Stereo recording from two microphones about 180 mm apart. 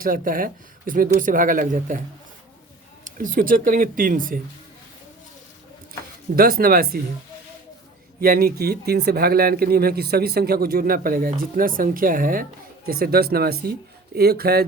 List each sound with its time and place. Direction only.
0.0 s speech: 50° right (ahead or behind)
3.0 s speech: 45° right (ahead or behind)
6.3 s speech: 55° right (ahead or behind)
8.2 s speech: 55° right (ahead or behind)